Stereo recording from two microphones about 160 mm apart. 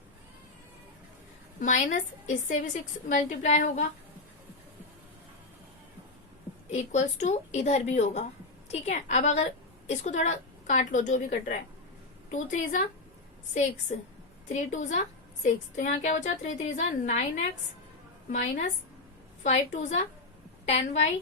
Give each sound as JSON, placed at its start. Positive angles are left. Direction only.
{"t": 1.5, "sound": "a woman's voice", "side_deg": 55}
{"t": 6.7, "sound": "a woman's voice", "side_deg": 45}
{"t": 14.5, "sound": "a woman's voice", "side_deg": 45}